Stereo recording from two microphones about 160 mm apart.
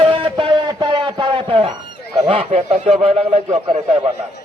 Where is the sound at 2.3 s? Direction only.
35° right (ahead or behind).